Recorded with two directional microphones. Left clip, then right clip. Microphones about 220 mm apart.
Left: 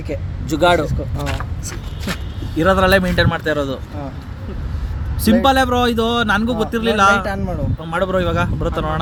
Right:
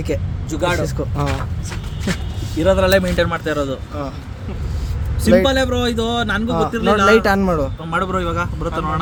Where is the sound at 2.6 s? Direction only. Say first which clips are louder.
Left 1 dB; 30° left (ahead or behind).